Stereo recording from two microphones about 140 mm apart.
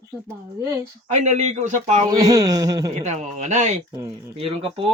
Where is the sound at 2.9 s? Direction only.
55° right (ahead or behind).